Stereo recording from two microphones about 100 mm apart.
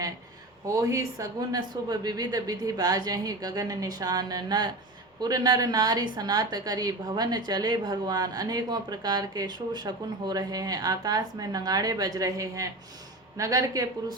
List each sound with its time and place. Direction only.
0.8 s a woman's voice: 35° right (ahead or behind)